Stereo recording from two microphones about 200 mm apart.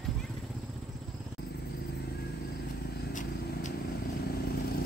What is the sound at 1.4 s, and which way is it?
Vehicle, 50° left (ahead or behind).